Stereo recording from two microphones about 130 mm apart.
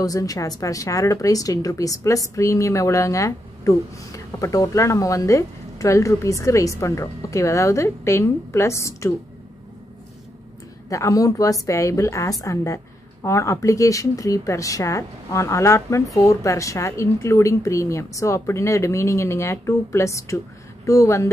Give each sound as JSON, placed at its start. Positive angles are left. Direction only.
{"t": 0.0, "sound": "a woman's voice", "side_deg": 25}
{"t": 10.9, "sound": "a woman's voice", "side_deg": 25}